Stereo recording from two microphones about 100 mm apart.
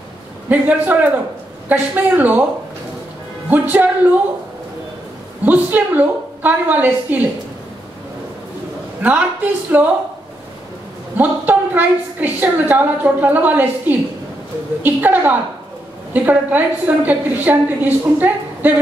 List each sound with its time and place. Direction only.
0.5 s a woman's voice: 15° right (ahead or behind)
3.4 s a woman's voice: 15° right (ahead or behind)
5.4 s a woman's voice: 15° right (ahead or behind)
9.0 s a woman's voice: 15° right (ahead or behind)
11.1 s a woman's voice: 20° right (ahead or behind)